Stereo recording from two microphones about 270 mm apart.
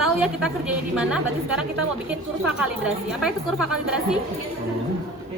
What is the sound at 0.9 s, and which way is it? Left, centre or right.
A woman's voice, centre.